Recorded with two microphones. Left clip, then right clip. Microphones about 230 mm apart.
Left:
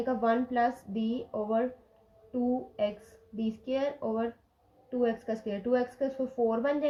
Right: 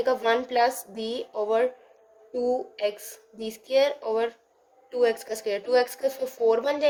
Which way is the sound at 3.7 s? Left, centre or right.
Right.